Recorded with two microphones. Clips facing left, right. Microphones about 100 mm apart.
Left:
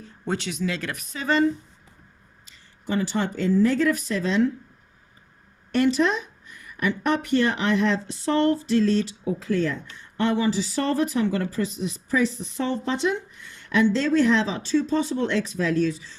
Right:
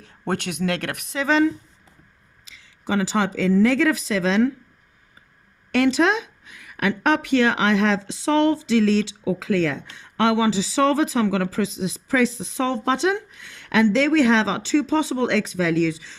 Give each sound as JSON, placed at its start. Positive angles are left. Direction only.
{"t": 0.0, "sound": "speech", "side_deg": -65}
{"t": 5.7, "sound": "a woman's voice", "side_deg": -90}